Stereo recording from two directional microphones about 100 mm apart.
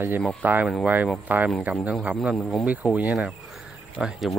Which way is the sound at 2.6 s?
15° right (ahead or behind).